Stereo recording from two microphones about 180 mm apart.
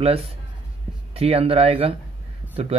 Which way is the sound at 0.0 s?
35° right (ahead or behind).